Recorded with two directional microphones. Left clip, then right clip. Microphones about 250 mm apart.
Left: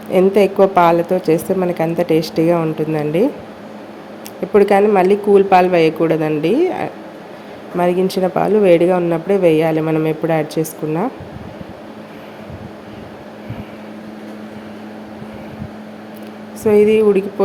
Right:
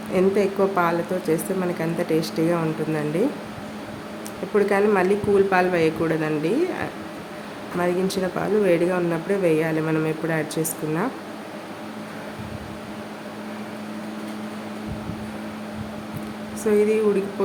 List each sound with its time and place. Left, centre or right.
0.1 s speech: left
4.5 s speech: left
16.6 s speech: left